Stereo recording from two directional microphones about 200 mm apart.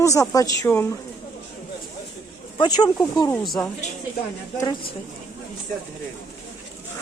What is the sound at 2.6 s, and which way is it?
Speech, 20° left (ahead or behind).